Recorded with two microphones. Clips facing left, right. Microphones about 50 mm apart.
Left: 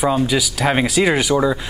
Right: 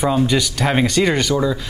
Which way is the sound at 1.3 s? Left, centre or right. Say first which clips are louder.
Left 2 dB; centre.